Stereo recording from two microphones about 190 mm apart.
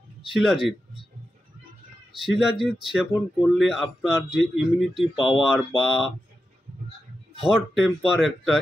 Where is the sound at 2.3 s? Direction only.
Centre (ahead or behind).